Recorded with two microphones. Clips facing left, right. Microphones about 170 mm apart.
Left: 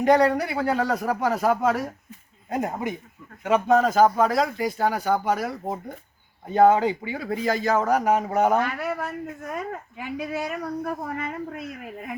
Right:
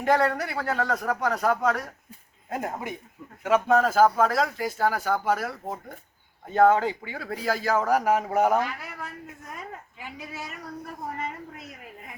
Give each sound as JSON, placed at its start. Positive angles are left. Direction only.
{"t": 0.0, "sound": "speech", "side_deg": 0}
{"t": 6.5, "sound": "speech", "side_deg": 0}
{"t": 8.6, "sound": "speech", "side_deg": 65}